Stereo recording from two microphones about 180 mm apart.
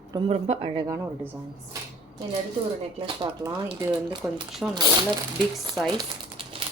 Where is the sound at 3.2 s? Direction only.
25° right (ahead or behind).